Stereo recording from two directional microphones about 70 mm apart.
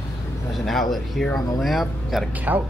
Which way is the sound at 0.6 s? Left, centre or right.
Centre.